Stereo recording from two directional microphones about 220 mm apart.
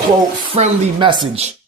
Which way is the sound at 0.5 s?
25° right (ahead or behind).